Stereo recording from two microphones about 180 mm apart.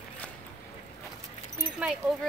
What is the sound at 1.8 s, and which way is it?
Speech, 5° right (ahead or behind).